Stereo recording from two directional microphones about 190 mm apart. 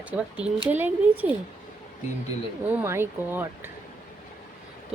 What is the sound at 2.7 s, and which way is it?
Speech, 10° right (ahead or behind).